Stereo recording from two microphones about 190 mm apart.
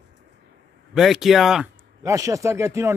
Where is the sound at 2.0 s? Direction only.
15° right (ahead or behind).